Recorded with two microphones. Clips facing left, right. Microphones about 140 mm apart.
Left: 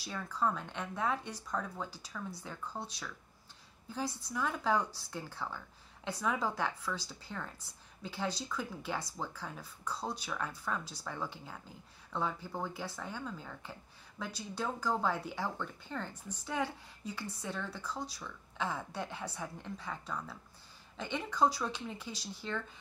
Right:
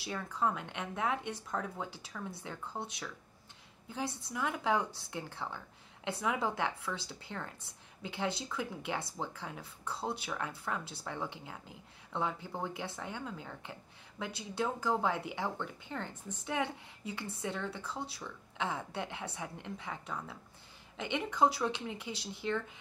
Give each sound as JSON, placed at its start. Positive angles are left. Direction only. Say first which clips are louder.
{"t": 0.0, "sound": "speech", "louder": "even", "side_deg": -20}
{"t": 8.1, "sound": "speech", "louder": "right 1 dB", "side_deg": -25}